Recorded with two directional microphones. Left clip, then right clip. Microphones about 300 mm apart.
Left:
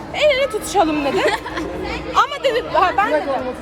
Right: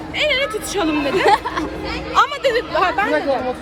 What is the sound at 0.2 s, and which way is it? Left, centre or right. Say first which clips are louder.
A woman's voice: left 2 dB; centre.